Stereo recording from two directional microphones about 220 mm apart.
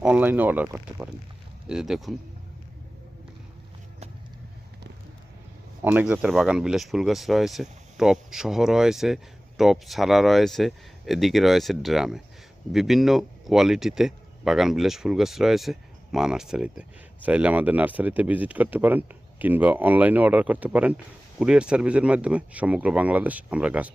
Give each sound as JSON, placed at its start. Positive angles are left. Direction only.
{"t": 0.0, "sound": "speech", "side_deg": -5}
{"t": 5.8, "sound": "speech", "side_deg": -5}